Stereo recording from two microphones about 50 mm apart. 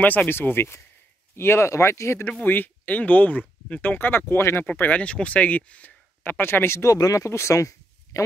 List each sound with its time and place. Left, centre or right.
0.3 s speech: left
2.4 s speech: left
3.8 s speech: left
4.3 s speech: left
4.6 s speech: left
5.0 s speech: left
6.3 s speech: left